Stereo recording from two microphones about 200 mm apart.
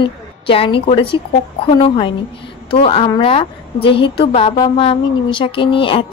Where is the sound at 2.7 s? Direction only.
30° left (ahead or behind).